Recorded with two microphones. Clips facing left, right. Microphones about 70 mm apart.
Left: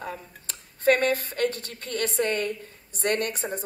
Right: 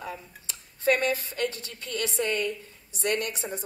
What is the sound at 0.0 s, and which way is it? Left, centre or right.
Speech, left.